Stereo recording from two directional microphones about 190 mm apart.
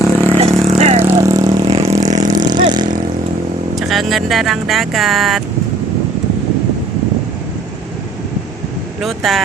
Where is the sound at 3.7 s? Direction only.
Centre (ahead or behind).